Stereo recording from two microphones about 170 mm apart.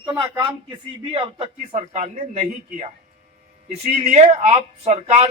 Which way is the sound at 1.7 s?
45° right (ahead or behind).